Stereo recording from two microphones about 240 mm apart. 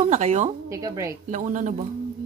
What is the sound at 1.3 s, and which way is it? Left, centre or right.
Speech, right.